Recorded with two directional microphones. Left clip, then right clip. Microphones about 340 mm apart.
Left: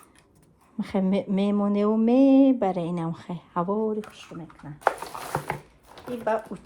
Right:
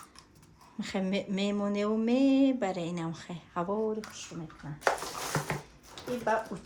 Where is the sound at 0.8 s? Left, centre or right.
Centre.